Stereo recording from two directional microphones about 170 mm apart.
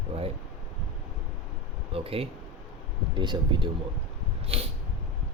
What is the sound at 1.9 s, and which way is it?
Speech, 35° right (ahead or behind).